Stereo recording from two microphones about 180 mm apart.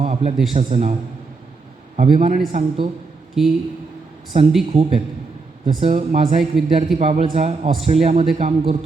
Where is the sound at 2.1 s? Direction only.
45° right (ahead or behind).